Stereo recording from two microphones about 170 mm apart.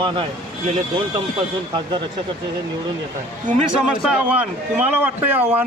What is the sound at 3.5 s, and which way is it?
Speech, 50° right (ahead or behind).